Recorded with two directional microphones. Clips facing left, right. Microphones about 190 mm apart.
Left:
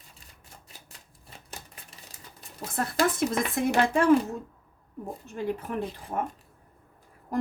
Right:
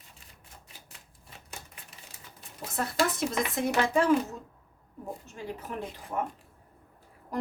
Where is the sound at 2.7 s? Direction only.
55° left (ahead or behind).